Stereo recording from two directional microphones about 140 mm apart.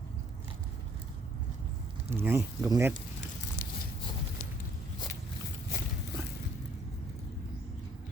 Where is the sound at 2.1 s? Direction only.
15° right (ahead or behind).